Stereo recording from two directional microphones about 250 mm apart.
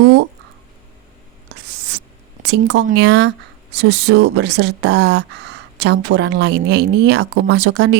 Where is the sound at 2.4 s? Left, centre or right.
Right.